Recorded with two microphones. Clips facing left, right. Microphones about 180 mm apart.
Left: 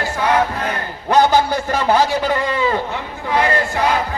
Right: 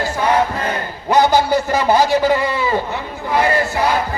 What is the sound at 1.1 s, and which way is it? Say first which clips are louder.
A man's voice: right 1 dB; 10° right (ahead or behind).